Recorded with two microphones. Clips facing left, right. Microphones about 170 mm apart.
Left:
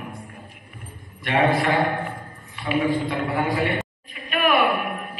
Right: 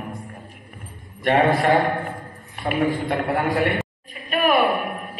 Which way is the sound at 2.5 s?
50° right (ahead or behind).